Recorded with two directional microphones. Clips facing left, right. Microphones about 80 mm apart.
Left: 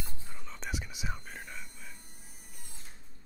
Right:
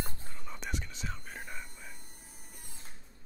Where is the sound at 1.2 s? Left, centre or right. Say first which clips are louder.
Right 1 dB; centre.